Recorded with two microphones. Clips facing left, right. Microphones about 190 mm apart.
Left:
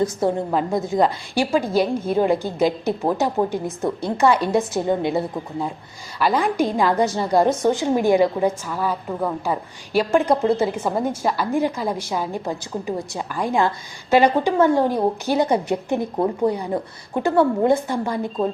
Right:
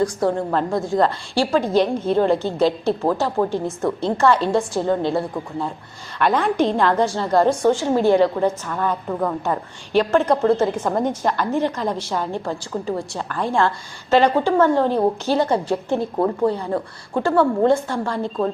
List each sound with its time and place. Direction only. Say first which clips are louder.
0.0 s a woman's voice: right 1 dB; 20° left (ahead or behind)
6.1 s a woman's voice: right 1 dB; 5° left (ahead or behind)